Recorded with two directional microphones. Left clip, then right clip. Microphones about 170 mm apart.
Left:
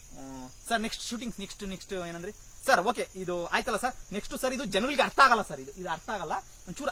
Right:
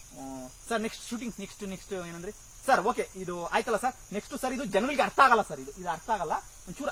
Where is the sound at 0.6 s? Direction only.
40° left (ahead or behind).